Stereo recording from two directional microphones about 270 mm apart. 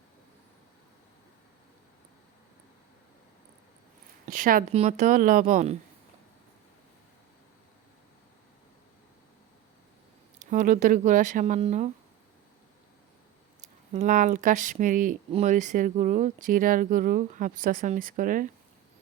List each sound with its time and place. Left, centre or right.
4.3 s speech: right
10.4 s speech: right
13.9 s speech: right